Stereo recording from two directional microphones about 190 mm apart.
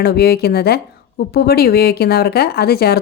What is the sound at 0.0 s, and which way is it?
Speech, 55° left (ahead or behind).